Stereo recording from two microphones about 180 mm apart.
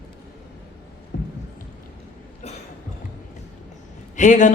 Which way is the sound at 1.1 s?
65° left (ahead or behind).